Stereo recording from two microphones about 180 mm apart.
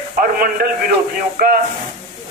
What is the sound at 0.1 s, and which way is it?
Speech, 50° right (ahead or behind).